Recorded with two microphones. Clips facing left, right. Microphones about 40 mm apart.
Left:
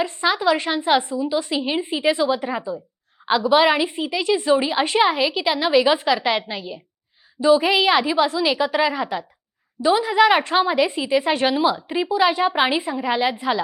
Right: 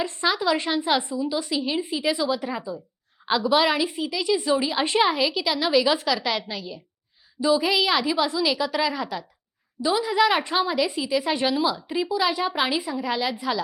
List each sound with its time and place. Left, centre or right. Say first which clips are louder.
0.0 s a woman's voice: left 4 dB; centre
1.5 s a woman's voice: left 3 dB; left